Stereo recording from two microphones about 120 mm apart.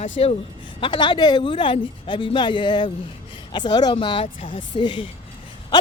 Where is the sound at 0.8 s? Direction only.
40° left (ahead or behind).